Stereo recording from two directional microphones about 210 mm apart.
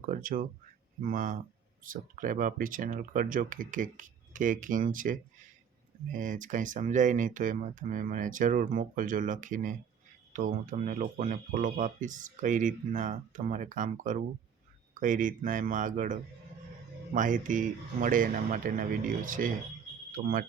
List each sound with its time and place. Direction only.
0.0 s speech: 40° right (ahead or behind)